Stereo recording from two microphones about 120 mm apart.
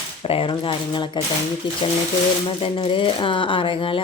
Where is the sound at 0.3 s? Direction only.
45° left (ahead or behind).